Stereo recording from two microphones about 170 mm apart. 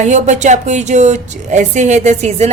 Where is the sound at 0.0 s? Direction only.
45° right (ahead or behind).